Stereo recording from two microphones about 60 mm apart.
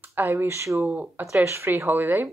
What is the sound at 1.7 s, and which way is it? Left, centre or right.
Speech, right.